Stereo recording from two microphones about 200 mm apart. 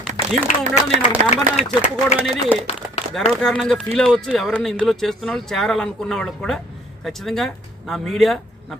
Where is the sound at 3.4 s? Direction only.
Centre (ahead or behind).